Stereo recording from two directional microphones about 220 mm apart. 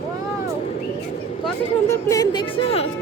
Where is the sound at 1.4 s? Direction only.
10° left (ahead or behind).